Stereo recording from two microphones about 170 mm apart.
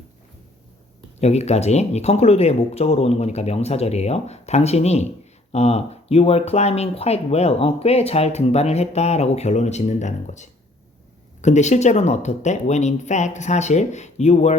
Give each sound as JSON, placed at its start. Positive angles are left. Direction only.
{"t": 1.2, "sound": "speech", "side_deg": 40}